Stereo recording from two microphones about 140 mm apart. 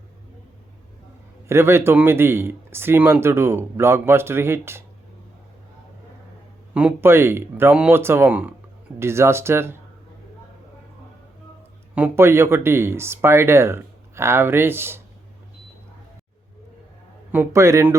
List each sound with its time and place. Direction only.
1.5 s speech: 15° right (ahead or behind)
6.7 s speech: 15° right (ahead or behind)
11.9 s speech: 15° right (ahead or behind)
17.3 s speech: 20° right (ahead or behind)